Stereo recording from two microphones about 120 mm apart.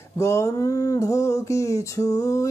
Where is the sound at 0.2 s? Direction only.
25° left (ahead or behind).